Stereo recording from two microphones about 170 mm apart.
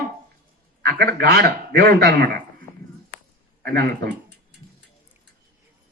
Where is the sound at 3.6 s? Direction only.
75° right (ahead or behind).